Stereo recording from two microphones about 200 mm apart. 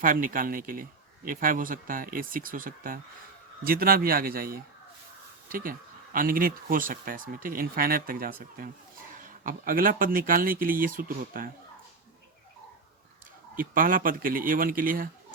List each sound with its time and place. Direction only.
0.0 s speech: 45° right (ahead or behind)
13.6 s speech: 45° right (ahead or behind)